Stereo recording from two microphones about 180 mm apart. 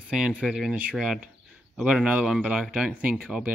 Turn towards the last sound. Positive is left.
turn(degrees=-5)  # may be behind; listen again after turning